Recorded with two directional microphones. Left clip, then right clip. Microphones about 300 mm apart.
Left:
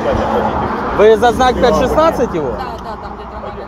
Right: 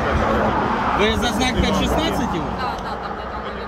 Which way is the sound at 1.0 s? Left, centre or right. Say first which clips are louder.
Left 11 dB; centre.